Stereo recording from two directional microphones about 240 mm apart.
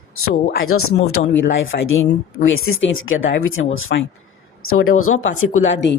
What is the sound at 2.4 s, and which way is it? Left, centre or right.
A woman's voice, left.